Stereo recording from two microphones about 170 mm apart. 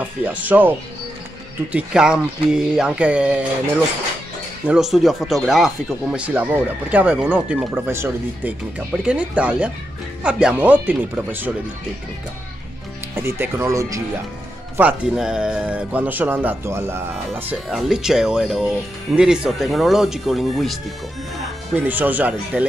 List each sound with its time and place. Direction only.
0.2 s speech: 10° right (ahead or behind)
4.6 s speech: centre (ahead or behind)
13.1 s speech: 15° right (ahead or behind)
14.8 s speech: 5° right (ahead or behind)